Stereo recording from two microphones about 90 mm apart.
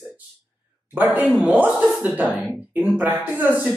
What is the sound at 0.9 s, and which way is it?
Speech, 20° right (ahead or behind).